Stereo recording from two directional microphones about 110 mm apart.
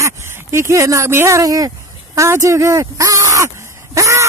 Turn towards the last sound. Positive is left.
turn(degrees=-30)  # may be behind; listen again after turning